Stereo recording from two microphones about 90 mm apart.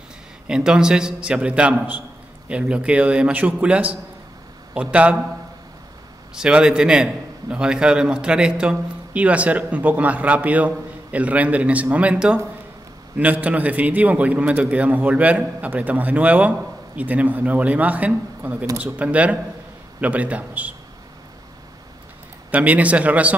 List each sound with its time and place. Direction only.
0.5 s a man's voice: 10° right (ahead or behind)
6.3 s a man's voice: 10° right (ahead or behind)
22.5 s a man's voice: 15° right (ahead or behind)